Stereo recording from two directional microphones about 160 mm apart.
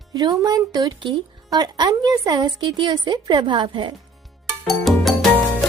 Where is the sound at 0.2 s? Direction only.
25° right (ahead or behind).